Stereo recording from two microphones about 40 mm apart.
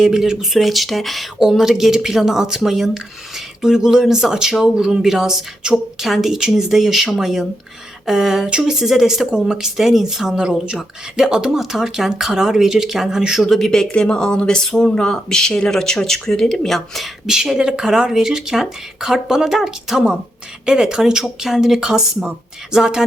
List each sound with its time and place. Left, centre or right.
0.0 s speech: centre
1.4 s speech: centre
8.8 s speech: centre
13.4 s speech: centre
13.9 s speech: left; by 17.1 s centre
17.2 s speech: centre